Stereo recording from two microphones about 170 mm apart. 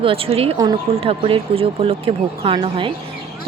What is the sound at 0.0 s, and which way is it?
Speech, 35° right (ahead or behind).